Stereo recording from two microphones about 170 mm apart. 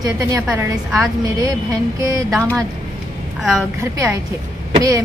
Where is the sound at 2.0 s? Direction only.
15° right (ahead or behind).